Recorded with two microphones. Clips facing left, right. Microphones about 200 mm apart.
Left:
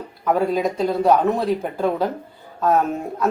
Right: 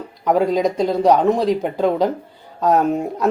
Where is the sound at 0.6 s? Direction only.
15° right (ahead or behind).